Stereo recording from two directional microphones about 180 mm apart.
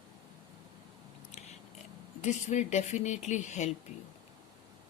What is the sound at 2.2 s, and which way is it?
A woman's voice, 40° left (ahead or behind).